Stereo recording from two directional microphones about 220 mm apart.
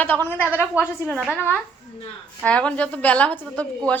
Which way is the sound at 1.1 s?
5° right (ahead or behind).